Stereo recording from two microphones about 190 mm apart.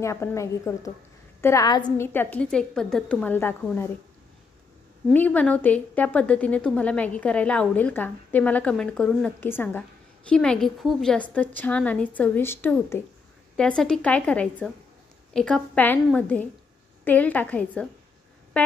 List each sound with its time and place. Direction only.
0.0 s a woman's voice: 15° left (ahead or behind)
2.1 s a woman's voice: 10° left (ahead or behind)
5.1 s a woman's voice: 10° left (ahead or behind)